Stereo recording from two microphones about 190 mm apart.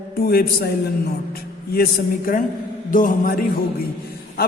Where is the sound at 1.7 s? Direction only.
50° left (ahead or behind).